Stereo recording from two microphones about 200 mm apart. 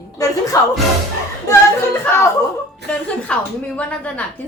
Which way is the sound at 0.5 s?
15° left (ahead or behind).